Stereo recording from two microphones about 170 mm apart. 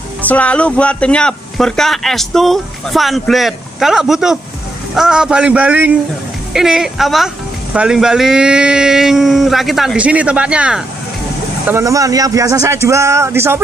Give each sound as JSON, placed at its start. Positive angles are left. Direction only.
{"t": 0.2, "sound": "speech", "side_deg": 10}